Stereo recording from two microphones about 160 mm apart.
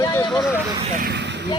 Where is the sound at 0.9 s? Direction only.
80° right.